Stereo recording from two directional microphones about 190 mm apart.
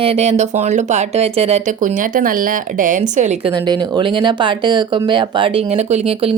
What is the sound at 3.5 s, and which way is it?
Speech, 20° right (ahead or behind).